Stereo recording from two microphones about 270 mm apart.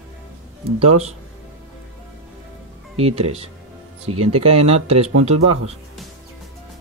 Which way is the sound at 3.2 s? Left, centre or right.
Right.